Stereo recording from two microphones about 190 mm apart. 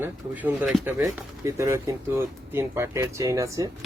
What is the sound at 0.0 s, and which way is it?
Speech, 10° right (ahead or behind).